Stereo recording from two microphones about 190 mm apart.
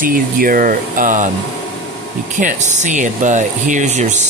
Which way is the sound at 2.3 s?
40° right (ahead or behind).